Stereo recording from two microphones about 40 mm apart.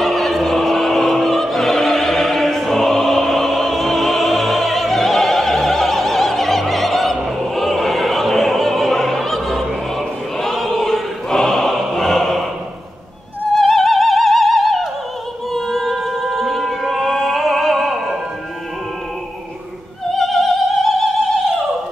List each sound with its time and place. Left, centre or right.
0.0 s opera: centre
13.6 s music: centre
20.1 s opera: centre